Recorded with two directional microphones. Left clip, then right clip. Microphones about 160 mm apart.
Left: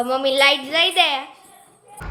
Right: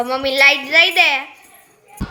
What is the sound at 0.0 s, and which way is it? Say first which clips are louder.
A woman's voice: right 3 dB; 5° right (ahead or behind).